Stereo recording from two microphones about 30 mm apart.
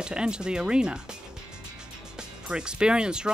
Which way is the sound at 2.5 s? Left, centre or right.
Right.